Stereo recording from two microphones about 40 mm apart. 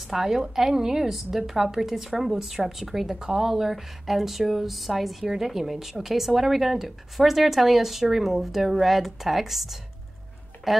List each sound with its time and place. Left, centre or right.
0.1 s a woman's voice: centre
3.2 s a woman's voice: centre